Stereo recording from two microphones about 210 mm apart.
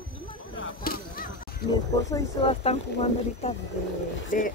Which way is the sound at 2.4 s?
30° left (ahead or behind).